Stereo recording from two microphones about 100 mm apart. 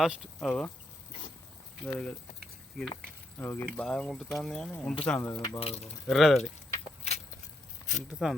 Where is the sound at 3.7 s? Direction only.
10° left (ahead or behind).